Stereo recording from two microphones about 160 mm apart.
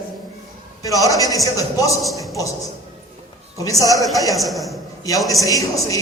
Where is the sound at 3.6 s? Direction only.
20° left (ahead or behind).